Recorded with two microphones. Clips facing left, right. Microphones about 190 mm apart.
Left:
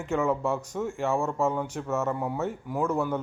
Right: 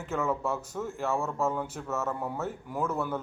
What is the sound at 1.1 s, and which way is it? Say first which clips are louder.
Speech: left 3 dB; 15° left (ahead or behind).